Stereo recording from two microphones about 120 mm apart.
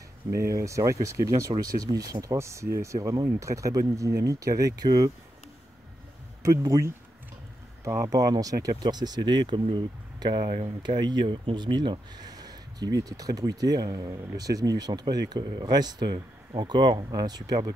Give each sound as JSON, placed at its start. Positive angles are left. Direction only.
{"t": 0.3, "sound": "speech", "side_deg": -25}
{"t": 6.4, "sound": "speech", "side_deg": -30}